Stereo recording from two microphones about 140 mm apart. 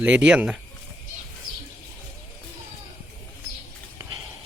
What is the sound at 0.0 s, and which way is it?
Speech, 10° right (ahead or behind).